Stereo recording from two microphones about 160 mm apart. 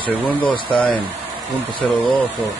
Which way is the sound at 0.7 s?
10° left (ahead or behind).